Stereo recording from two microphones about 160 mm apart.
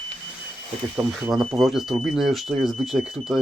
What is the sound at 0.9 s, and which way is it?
Speech, 5° right (ahead or behind).